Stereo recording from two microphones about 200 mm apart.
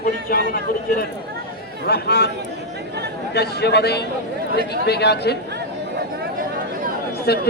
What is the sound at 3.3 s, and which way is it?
Speech, 55° left (ahead or behind).